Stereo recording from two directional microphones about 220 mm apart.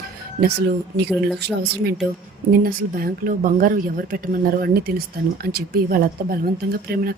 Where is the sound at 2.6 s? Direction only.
40° right (ahead or behind).